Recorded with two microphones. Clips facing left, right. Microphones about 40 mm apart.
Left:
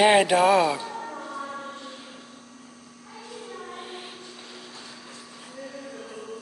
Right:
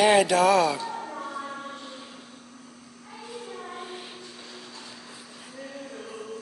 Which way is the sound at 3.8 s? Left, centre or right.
Centre.